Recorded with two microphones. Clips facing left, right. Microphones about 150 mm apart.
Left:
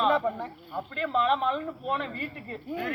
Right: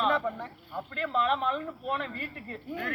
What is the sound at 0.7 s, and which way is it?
Speech, 5° left (ahead or behind).